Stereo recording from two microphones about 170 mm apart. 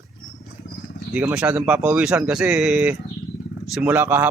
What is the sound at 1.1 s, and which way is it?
A man's voice, 10° right (ahead or behind).